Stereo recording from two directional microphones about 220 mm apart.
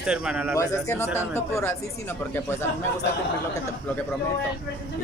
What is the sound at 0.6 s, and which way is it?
Speech, 15° left (ahead or behind).